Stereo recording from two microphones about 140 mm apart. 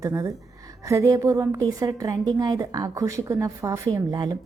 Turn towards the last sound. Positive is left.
turn(degrees=-30)  # may be behind; listen again after turning